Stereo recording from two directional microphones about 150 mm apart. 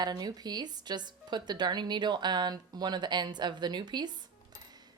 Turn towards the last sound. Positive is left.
turn(degrees=-30)  # may be behind; listen again after turning